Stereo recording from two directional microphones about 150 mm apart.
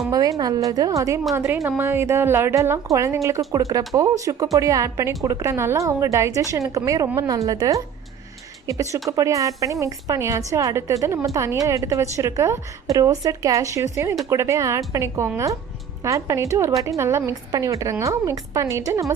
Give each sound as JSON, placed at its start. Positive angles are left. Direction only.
{"t": 0.1, "sound": "a woman's voice", "side_deg": -25}